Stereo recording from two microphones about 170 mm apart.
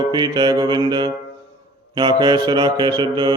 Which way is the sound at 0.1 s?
25° right (ahead or behind).